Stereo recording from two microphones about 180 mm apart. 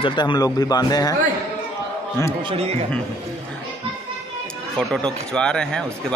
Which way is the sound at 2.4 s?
35° right (ahead or behind).